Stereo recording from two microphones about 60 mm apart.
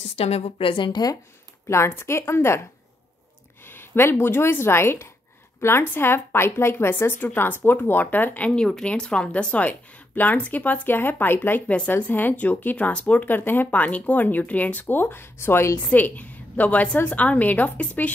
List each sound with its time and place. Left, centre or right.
1.0 s speech: left
1.7 s a woman's voice: left
3.6 s a woman's voice: left
8.8 s speech: centre; by 11.6 s left
11.6 s a woman's voice: centre; by 15.7 s left
15.8 s a woman's voice: left